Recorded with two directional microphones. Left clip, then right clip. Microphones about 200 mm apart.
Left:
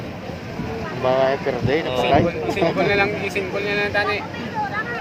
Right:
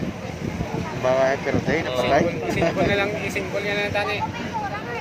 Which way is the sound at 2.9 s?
50° left (ahead or behind).